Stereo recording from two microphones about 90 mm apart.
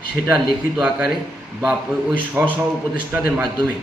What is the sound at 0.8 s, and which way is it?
Speech, 15° right (ahead or behind).